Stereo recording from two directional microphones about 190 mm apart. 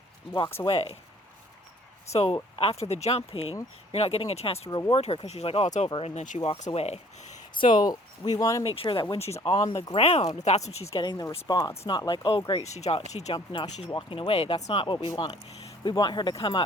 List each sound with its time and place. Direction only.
0.3 s speech: 20° left (ahead or behind)
2.1 s speech: 30° left (ahead or behind)
8.6 s speech: 30° left (ahead or behind)
10.9 s speech: 20° left (ahead or behind)